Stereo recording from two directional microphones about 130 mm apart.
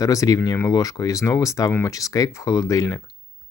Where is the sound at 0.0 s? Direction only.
25° left (ahead or behind).